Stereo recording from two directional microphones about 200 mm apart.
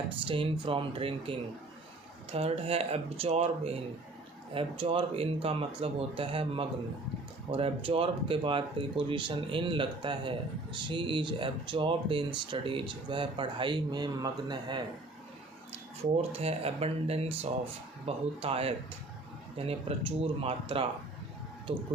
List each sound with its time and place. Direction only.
0.3 s speech: 25° right (ahead or behind)
16.3 s speech: 30° right (ahead or behind)